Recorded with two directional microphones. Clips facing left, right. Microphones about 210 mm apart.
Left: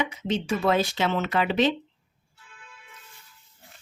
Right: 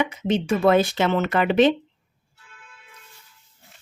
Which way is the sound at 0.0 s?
55° right (ahead or behind).